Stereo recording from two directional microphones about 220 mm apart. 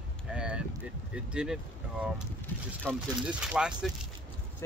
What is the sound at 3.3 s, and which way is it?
Speech, 5° right (ahead or behind).